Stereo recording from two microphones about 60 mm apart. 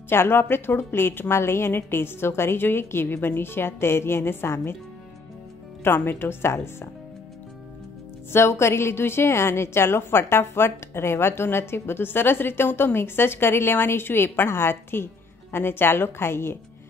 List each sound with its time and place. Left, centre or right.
0.1 s a woman's voice: left
5.9 s a woman's voice: left
8.3 s a woman's voice: left